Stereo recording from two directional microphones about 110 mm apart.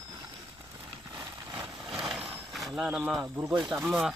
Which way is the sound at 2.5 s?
Centre (ahead or behind).